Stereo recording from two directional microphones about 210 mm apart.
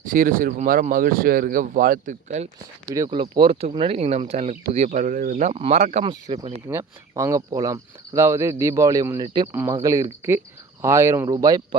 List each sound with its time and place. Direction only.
0.0 s speech: 40° right (ahead or behind)
2.9 s speech: 20° right (ahead or behind)
6.7 s speech: 15° right (ahead or behind)